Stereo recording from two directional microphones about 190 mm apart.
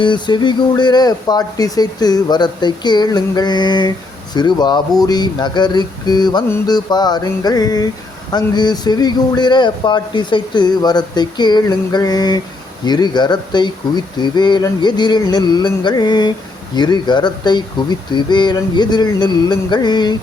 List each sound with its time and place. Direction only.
0.0 s speech: 25° left (ahead or behind)